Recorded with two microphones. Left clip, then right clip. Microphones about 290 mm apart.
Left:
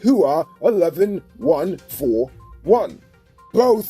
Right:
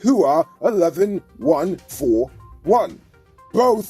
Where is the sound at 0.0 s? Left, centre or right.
Right.